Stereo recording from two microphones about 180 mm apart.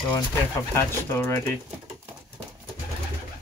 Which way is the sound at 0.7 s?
15° left (ahead or behind).